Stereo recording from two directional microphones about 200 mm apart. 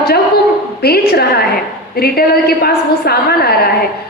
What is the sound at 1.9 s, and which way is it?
A woman's voice, 50° left (ahead or behind).